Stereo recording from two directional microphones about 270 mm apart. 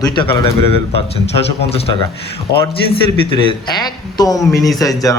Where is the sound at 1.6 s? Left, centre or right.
Left.